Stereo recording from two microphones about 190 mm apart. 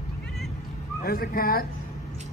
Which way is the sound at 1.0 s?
50° left (ahead or behind).